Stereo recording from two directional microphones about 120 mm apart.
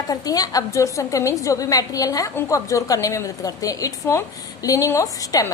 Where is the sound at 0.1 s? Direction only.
30° left (ahead or behind).